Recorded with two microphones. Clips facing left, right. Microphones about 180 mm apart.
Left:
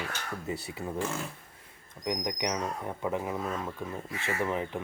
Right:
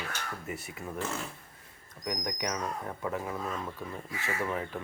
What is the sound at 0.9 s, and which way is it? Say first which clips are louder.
Speech: left 1 dB; 10° left (ahead or behind).